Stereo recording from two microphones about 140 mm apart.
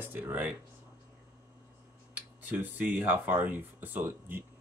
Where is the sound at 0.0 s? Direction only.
15° right (ahead or behind).